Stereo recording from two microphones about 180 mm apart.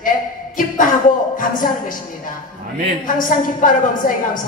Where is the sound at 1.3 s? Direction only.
50° left (ahead or behind).